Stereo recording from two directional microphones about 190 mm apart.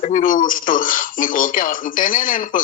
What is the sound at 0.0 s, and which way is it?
Speech, 45° left (ahead or behind).